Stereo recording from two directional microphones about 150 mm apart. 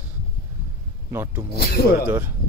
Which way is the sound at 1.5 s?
90° left.